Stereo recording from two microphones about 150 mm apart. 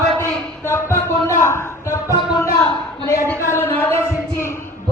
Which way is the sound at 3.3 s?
15° left (ahead or behind).